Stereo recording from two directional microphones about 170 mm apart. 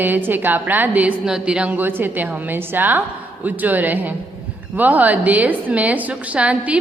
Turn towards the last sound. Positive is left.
turn(degrees=-5)  # may be behind; listen again after turning